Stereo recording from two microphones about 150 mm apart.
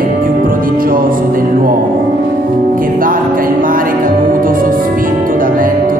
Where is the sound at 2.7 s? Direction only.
70° right (ahead or behind).